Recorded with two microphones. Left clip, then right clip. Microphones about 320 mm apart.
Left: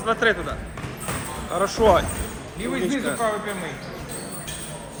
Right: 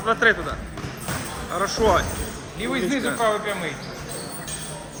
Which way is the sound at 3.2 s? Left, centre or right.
Right.